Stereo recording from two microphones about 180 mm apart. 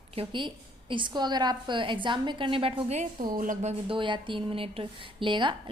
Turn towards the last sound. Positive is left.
turn(degrees=-25)  # may be behind; listen again after turning